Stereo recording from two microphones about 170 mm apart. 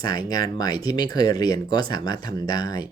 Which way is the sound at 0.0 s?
20° left (ahead or behind).